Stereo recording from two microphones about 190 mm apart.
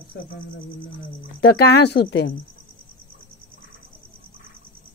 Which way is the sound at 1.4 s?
60° left (ahead or behind).